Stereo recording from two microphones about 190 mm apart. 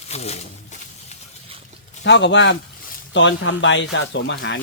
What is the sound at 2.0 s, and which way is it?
Speech, 70° left (ahead or behind).